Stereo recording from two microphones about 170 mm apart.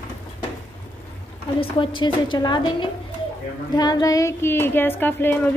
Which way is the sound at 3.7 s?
25° left (ahead or behind).